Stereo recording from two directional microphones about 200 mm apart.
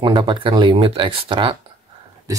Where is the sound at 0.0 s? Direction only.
25° right (ahead or behind).